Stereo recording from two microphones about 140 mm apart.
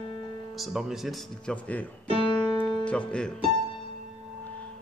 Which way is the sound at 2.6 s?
10° left (ahead or behind).